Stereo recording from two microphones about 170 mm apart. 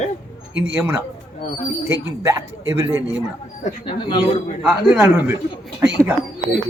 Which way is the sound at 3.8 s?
25° left (ahead or behind).